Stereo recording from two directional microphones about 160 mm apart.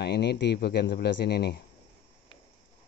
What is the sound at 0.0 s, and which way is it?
A man's voice, 90° left.